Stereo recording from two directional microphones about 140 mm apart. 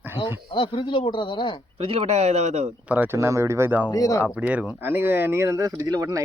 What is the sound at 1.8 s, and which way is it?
Speech, 45° right (ahead or behind).